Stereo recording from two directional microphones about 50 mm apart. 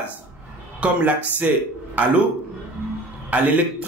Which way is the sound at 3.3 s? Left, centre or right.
Right.